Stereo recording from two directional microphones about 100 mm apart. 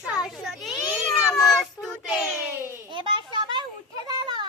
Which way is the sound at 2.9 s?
55° right (ahead or behind).